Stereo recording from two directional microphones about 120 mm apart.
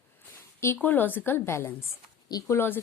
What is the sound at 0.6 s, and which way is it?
A woman's voice, 20° left (ahead or behind).